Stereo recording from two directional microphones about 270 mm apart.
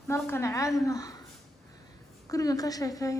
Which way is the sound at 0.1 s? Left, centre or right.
Centre.